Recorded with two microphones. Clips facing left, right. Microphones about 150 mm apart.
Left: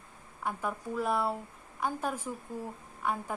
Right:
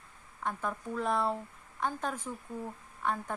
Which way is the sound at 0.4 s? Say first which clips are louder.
Left 1 dB; 10° left (ahead or behind).